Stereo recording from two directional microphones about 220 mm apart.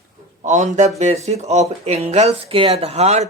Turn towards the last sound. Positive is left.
turn(degrees=-30)  # may be behind; listen again after turning